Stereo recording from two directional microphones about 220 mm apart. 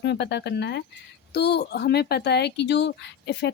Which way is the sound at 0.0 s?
50° left (ahead or behind).